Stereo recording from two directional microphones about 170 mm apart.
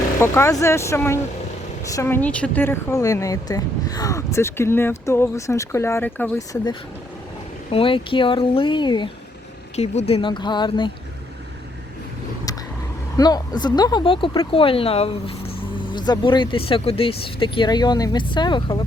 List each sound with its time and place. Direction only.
0.2 s a woman's voice: 15° left (ahead or behind)
7.7 s speech: 30° left (ahead or behind)
9.7 s speech: 40° left (ahead or behind)
13.1 s speech: 25° left (ahead or behind)